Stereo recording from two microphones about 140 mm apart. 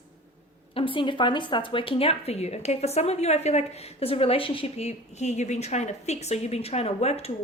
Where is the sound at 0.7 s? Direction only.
40° left (ahead or behind).